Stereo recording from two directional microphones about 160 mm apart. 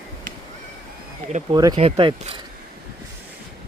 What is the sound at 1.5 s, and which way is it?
Speech, 25° right (ahead or behind).